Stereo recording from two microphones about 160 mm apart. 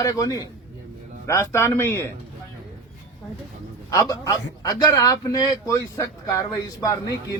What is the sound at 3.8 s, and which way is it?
A man's voice, 20° left (ahead or behind).